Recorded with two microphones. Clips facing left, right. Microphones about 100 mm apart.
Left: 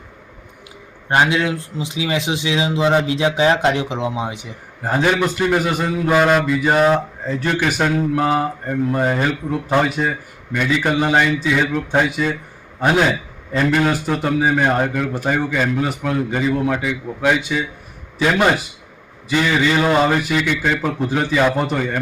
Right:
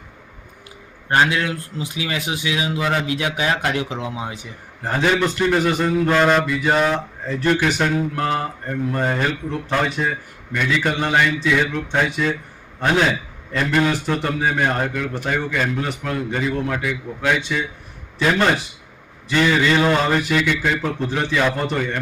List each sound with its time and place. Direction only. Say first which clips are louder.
1.0 s speech: left 2 dB; 20° left (ahead or behind)
4.8 s a man's voice: left 2 dB; 5° left (ahead or behind)
6.8 s speech: left 5 dB; 20° left (ahead or behind)
7.3 s a man's voice: right 1 dB; centre (ahead or behind)
13.5 s a man's voice: left 5 dB; 25° left (ahead or behind)
14.1 s speech: left 3 dB; 10° left (ahead or behind)